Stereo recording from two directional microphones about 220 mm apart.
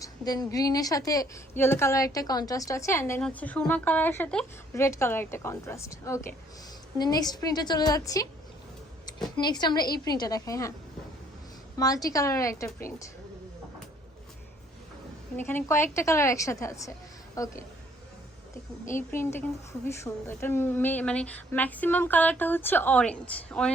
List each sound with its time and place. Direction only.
0.0 s a woman's voice: 15° left (ahead or behind)
9.4 s a woman's voice: 20° left (ahead or behind)
11.8 s a woman's voice: 15° left (ahead or behind)
15.4 s a woman's voice: 10° left (ahead or behind)
18.9 s a woman's voice: 10° left (ahead or behind)